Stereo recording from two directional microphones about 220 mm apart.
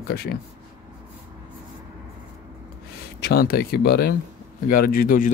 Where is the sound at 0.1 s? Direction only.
45° left (ahead or behind).